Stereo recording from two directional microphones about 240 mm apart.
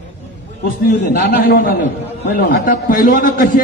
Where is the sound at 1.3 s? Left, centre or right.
Left.